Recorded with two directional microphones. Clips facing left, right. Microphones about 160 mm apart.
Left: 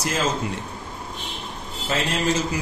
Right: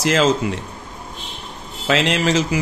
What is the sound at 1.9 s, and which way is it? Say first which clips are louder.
Speech: right 5 dB; 90° right.